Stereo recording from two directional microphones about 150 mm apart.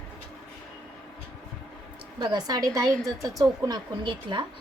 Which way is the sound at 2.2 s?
30° right (ahead or behind).